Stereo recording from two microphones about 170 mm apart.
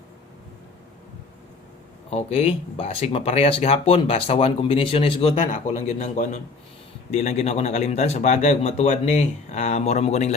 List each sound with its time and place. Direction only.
2.0 s speech: 35° left (ahead or behind)
5.4 s a man's voice: 50° left (ahead or behind)